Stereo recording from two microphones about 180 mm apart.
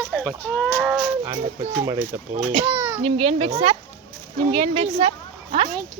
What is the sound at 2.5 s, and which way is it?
A woman's voice, 35° right (ahead or behind).